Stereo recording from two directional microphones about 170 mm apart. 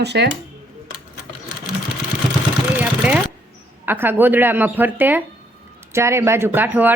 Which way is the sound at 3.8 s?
10° right (ahead or behind).